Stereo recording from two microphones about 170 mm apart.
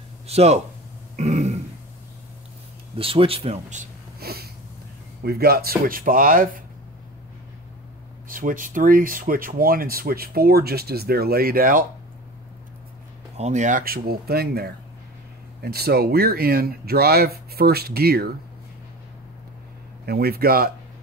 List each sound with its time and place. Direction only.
0.3 s speech: 40° right (ahead or behind)
3.0 s speech: 35° right (ahead or behind)
3.8 s a sound: 65° right (ahead or behind)
5.2 s speech: 65° right (ahead or behind)
8.3 s speech: 55° right (ahead or behind)
13.4 s speech: 45° right (ahead or behind); by 18.3 s 65° right (ahead or behind)
20.1 s speech: 65° right (ahead or behind)